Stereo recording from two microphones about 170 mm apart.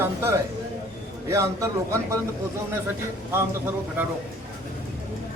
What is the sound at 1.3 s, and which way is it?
Speech, 20° right (ahead or behind).